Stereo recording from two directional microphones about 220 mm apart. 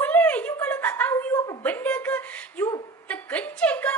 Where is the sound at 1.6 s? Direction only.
5° left (ahead or behind).